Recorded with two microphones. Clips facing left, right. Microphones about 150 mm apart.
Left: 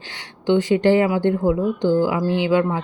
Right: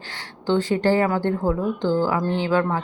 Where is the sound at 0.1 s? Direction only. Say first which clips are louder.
Left 3 dB; 20° left (ahead or behind).